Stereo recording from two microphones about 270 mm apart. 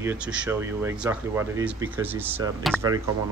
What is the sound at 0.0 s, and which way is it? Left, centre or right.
Speech, centre.